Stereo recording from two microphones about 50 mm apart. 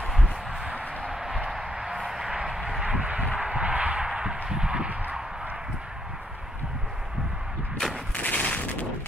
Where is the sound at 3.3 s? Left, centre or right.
Centre.